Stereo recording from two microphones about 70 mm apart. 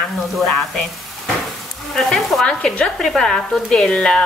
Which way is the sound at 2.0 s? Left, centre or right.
Centre.